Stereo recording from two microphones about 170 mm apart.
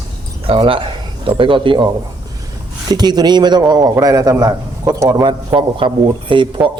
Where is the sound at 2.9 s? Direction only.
25° right (ahead or behind).